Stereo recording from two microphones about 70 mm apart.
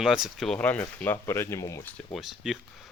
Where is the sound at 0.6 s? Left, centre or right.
Left.